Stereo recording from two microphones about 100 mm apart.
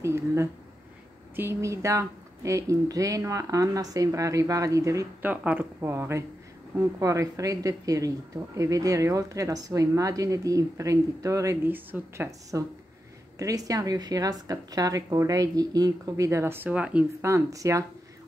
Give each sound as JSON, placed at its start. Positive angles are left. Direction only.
{"t": 0.0, "sound": "speech", "side_deg": -30}
{"t": 5.2, "sound": "speech", "side_deg": -15}
{"t": 11.7, "sound": "speech", "side_deg": -20}
{"t": 12.3, "sound": "speech", "side_deg": -35}
{"t": 17.2, "sound": "speech", "side_deg": -30}